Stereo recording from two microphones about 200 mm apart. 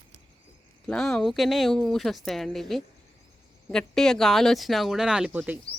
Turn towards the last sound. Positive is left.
turn(degrees=-5)  # may be behind; listen again after turning